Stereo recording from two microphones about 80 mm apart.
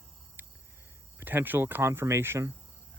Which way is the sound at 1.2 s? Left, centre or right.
Right.